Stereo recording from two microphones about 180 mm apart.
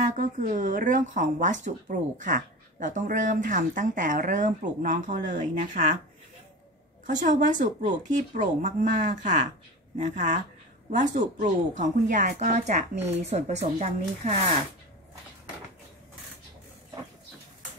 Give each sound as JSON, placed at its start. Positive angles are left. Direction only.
{"t": 0.0, "sound": "speech", "side_deg": -45}
{"t": 7.1, "sound": "a woman's voice", "side_deg": -45}